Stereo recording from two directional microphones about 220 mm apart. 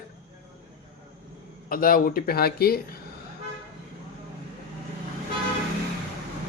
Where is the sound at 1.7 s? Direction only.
40° left (ahead or behind).